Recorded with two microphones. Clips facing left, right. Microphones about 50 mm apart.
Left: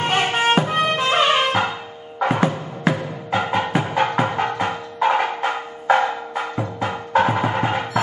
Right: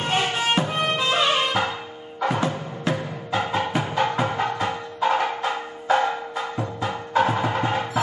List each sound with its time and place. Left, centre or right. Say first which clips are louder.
0.0 s music: left 4 dB; left